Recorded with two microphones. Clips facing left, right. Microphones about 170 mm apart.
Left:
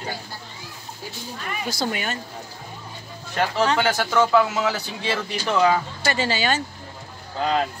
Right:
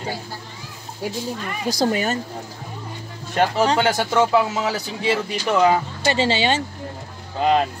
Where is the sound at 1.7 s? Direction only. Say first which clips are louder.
Right 7 dB; 35° right (ahead or behind).